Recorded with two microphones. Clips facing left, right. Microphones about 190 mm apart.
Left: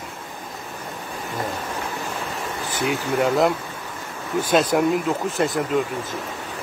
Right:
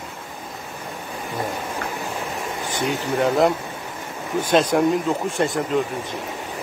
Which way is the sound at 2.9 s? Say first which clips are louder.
Even; centre (ahead or behind).